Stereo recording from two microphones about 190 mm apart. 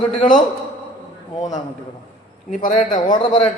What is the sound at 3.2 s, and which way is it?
Speech, 30° left (ahead or behind).